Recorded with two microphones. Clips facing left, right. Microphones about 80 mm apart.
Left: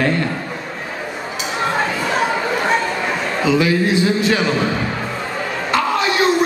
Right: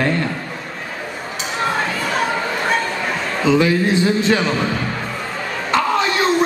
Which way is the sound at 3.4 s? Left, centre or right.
Centre.